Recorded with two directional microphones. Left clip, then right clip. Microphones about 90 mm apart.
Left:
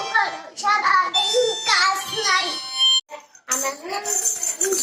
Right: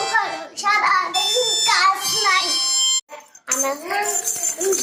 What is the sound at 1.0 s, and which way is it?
Child singing, 35° left (ahead or behind).